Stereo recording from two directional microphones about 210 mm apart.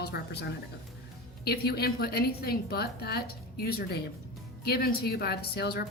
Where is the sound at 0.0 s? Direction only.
50° left (ahead or behind).